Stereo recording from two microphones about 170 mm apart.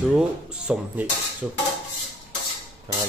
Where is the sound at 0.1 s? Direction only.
5° right (ahead or behind).